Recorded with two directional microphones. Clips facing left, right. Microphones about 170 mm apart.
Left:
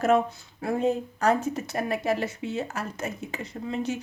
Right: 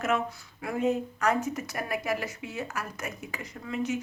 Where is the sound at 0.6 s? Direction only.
30° left (ahead or behind).